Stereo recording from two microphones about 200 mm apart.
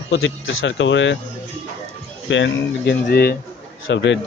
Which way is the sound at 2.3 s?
65° left (ahead or behind).